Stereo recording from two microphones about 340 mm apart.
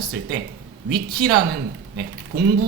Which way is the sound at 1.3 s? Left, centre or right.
Right.